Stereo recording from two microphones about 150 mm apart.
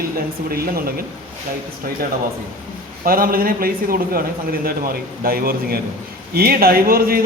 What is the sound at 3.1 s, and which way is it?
A man's voice, 75° right (ahead or behind).